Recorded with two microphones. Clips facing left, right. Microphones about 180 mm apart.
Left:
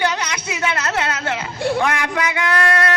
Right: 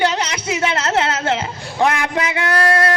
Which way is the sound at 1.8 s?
25° right (ahead or behind).